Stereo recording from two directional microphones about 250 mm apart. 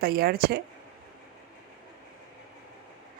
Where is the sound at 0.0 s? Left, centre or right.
Right.